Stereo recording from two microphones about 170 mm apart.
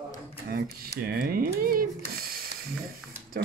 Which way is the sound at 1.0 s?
60° right (ahead or behind).